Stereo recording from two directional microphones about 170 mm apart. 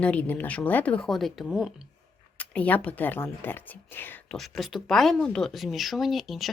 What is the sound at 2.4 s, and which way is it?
Speech, 10° left (ahead or behind).